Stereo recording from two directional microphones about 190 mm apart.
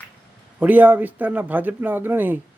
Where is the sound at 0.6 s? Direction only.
10° right (ahead or behind).